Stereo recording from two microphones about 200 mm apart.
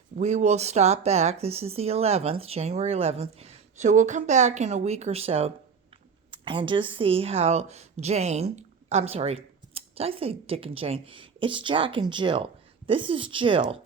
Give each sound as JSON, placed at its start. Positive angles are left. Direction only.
{"t": 0.2, "sound": "speech", "side_deg": -35}